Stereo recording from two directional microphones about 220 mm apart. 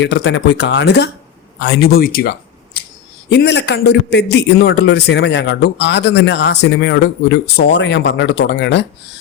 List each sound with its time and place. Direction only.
0.0 s a man's voice: 50° left (ahead or behind)